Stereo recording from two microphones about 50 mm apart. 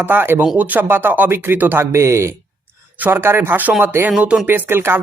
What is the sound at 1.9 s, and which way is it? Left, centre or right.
Speech, right.